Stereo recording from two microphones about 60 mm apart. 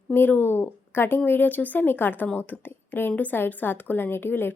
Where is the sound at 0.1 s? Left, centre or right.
Left.